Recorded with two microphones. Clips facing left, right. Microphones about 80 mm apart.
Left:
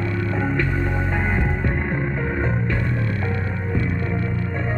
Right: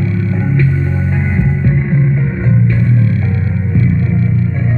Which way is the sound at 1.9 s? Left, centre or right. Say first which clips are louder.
Right 8 dB; left.